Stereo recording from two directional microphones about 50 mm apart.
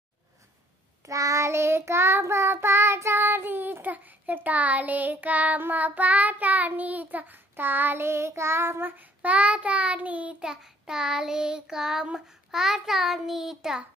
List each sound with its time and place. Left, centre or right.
1.0 s child singing: right
8.0 s child singing: right
8.8 s child singing: right
10.4 s child singing: centre